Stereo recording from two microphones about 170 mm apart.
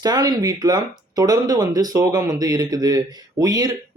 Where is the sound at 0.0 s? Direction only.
20° right (ahead or behind).